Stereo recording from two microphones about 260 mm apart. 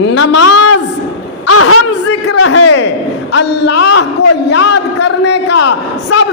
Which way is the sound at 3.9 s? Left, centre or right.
Left.